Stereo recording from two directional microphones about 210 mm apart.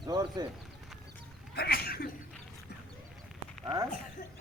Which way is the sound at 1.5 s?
50° left (ahead or behind).